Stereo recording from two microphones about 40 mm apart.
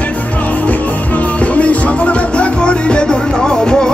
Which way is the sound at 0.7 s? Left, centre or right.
Left.